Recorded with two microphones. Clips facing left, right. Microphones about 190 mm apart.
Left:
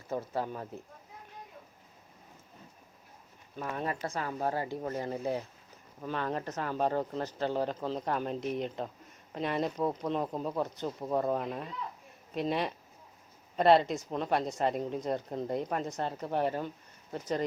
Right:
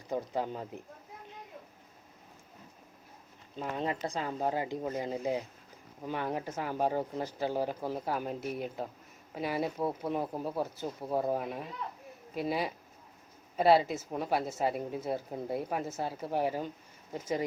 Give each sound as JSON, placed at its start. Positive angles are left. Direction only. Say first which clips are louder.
{"t": 0.1, "sound": "speech", "louder": "right 1 dB", "side_deg": -15}
{"t": 3.6, "sound": "speech", "louder": "right 1 dB", "side_deg": -20}